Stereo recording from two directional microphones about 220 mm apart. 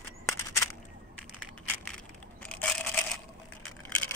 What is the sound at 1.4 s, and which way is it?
Crushing, 5° left (ahead or behind).